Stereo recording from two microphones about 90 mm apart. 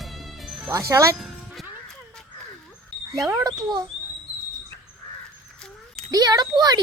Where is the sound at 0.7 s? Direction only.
35° right (ahead or behind).